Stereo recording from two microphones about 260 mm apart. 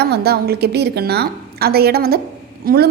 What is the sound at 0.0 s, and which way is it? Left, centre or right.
A woman's voice, right.